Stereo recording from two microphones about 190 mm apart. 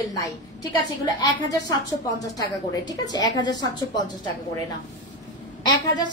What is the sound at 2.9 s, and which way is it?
Speech, 20° left (ahead or behind).